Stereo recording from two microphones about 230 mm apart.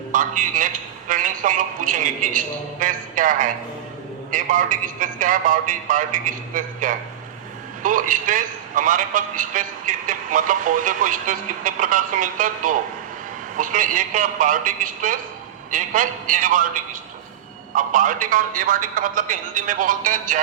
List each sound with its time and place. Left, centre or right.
0.1 s a man's voice: right
17.7 s a man's voice: right